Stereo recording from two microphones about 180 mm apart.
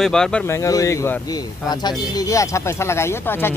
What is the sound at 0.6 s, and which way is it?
Speech, 20° left (ahead or behind).